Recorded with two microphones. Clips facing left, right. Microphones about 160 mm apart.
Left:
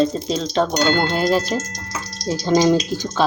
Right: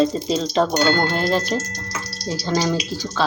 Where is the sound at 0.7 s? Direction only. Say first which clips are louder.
Left 1 dB; 15° left (ahead or behind).